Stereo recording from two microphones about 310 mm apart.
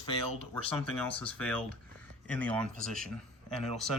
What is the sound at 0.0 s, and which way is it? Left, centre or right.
Speech, centre.